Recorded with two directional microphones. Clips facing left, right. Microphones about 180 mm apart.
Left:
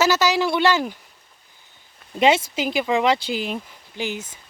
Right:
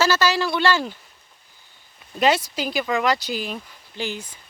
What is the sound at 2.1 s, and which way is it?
Speech, 25° left (ahead or behind).